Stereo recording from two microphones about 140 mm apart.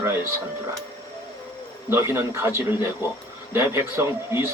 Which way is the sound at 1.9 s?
20° right (ahead or behind).